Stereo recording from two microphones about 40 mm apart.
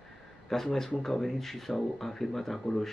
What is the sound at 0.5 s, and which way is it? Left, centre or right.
Speech, centre.